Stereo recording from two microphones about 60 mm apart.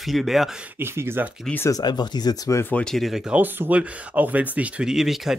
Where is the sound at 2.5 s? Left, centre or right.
Left.